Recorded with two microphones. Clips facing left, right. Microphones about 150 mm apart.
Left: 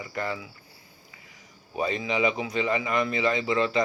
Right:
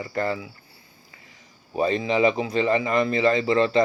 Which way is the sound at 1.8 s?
35° right (ahead or behind).